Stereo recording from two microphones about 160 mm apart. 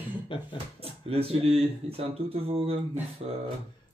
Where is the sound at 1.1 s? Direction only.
35° right (ahead or behind).